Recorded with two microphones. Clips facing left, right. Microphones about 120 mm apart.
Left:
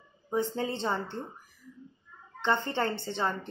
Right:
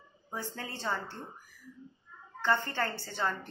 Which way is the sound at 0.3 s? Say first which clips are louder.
Left 10 dB; 25° left (ahead or behind).